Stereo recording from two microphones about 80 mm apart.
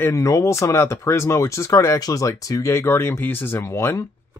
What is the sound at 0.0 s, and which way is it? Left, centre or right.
Speech, left.